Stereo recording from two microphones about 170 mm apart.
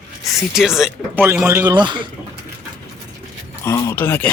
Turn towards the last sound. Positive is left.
turn(degrees=10)  # may be behind; listen again after turning